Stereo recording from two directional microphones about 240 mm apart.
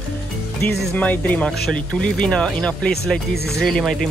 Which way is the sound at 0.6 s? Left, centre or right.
Centre.